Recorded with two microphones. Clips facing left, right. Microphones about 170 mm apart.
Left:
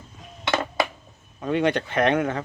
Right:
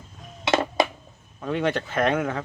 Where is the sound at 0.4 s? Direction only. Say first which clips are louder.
Right 3 dB; 25° right (ahead or behind).